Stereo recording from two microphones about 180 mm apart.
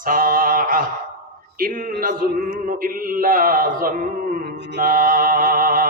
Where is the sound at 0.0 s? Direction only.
50° right (ahead or behind).